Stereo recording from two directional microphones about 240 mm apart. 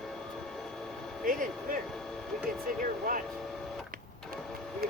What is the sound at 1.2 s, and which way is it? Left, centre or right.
Speech, right.